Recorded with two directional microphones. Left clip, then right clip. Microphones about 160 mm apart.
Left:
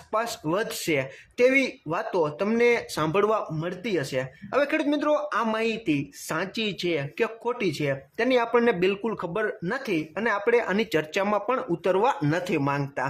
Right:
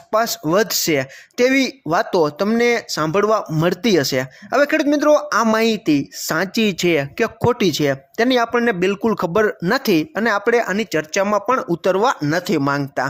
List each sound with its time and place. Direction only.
0.1 s speech: 35° right (ahead or behind)
1.9 s speech: 45° right (ahead or behind)
2.5 s speech: 30° right (ahead or behind)
3.6 s speech: 55° right (ahead or behind); by 6.4 s 35° right (ahead or behind)
6.4 s speech: 45° right (ahead or behind)
9.1 s speech: 50° right (ahead or behind)
10.2 s speech: 35° right (ahead or behind)